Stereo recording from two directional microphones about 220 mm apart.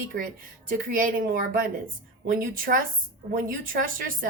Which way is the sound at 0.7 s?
40° right (ahead or behind).